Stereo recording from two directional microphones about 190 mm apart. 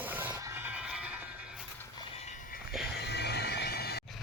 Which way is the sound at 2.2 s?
40° left (ahead or behind).